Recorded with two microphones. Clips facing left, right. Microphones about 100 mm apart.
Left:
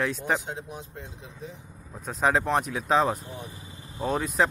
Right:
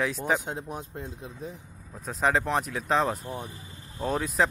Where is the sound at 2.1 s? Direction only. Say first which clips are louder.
Left 1 dB; centre (ahead or behind).